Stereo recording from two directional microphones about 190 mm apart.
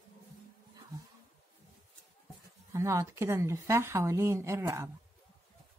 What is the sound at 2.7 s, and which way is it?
Speech, 15° right (ahead or behind).